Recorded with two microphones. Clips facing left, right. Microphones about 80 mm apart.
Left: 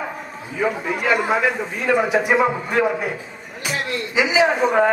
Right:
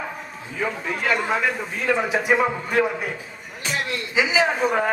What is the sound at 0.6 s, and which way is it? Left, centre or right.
A man's voice, centre.